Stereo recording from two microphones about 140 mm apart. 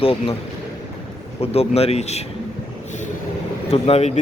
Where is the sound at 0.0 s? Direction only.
40° left (ahead or behind).